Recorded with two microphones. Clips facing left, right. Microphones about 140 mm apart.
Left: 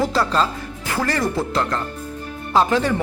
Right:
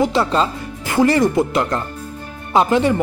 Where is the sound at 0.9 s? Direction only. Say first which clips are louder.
Right 8 dB; 25° right (ahead or behind).